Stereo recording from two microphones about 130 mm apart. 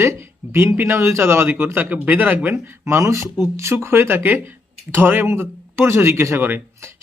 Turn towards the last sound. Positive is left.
turn(degrees=-15)  # may be behind; listen again after turning